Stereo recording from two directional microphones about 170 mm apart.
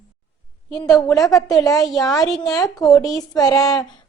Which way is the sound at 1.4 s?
20° left (ahead or behind).